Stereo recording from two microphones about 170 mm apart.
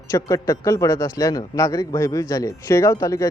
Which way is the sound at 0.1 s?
20° left (ahead or behind).